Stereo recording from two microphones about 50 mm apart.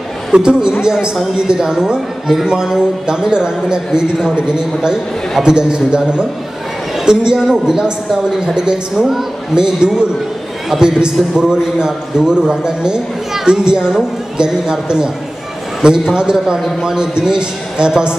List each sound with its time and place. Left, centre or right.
0.3 s a man's voice: centre